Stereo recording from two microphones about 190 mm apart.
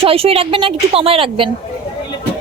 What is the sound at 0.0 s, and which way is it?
A woman's voice, 30° right (ahead or behind).